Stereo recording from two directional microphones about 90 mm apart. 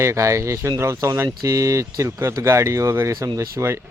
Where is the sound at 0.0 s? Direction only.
35° right (ahead or behind).